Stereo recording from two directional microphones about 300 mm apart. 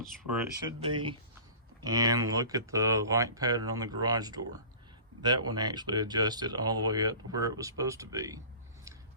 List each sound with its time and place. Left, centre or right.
0.0 s speech: centre
0.8 s speech: centre